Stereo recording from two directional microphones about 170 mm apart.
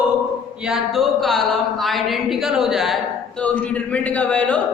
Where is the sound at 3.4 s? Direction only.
10° left (ahead or behind).